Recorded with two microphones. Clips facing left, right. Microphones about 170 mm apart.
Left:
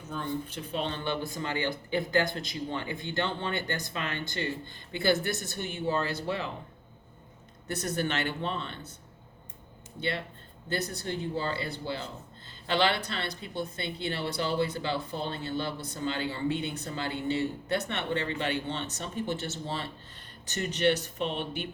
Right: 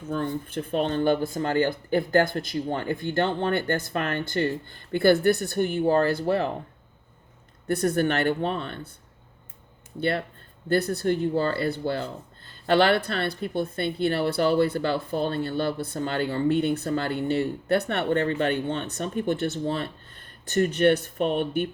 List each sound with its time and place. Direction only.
0.1 s speech: 50° right (ahead or behind)
7.7 s speech: 55° right (ahead or behind)
10.0 s speech: 55° right (ahead or behind)